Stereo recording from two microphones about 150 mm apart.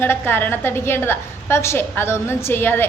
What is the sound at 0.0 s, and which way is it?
A woman's voice, 15° left (ahead or behind).